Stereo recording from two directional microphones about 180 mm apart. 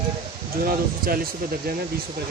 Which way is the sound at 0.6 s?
55° right (ahead or behind).